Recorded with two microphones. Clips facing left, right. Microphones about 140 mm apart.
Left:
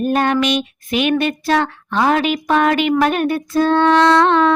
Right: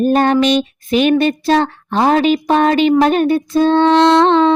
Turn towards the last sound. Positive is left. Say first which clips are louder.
# right 3 dB
turn(degrees=-25)  # may be behind; listen again after turning